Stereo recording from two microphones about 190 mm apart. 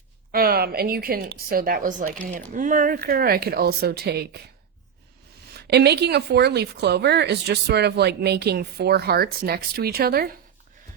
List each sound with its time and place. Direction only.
0.3 s speech: 50° right (ahead or behind)
5.5 s speech: 60° right (ahead or behind)